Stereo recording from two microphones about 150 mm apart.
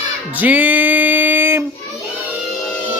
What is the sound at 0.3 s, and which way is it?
Music, 10° right (ahead or behind).